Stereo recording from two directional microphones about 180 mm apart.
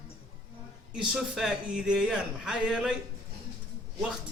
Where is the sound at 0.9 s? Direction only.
5° right (ahead or behind).